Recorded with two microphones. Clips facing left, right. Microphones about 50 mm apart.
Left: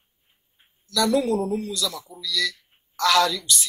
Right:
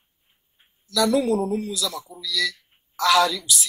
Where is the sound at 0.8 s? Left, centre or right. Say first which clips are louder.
Right 1 dB; centre.